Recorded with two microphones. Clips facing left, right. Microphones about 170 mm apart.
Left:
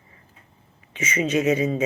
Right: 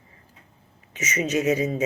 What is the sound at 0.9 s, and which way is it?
Speech, 40° right (ahead or behind).